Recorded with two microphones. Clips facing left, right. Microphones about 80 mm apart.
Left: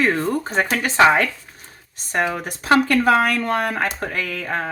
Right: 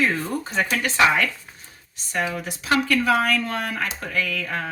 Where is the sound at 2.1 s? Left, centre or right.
Left.